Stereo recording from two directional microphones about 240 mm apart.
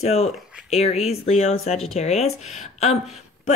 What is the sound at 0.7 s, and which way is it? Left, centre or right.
Speech, left.